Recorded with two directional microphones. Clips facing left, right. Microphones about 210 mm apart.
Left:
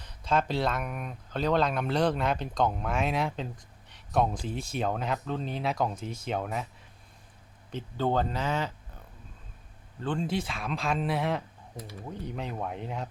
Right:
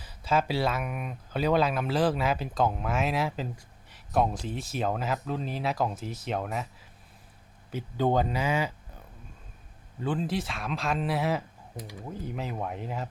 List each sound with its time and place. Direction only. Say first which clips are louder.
0.0 s speech: right 1 dB; 5° right (ahead or behind)
7.7 s speech: right 2 dB; 10° right (ahead or behind)
10.0 s speech: right 1 dB; 5° right (ahead or behind)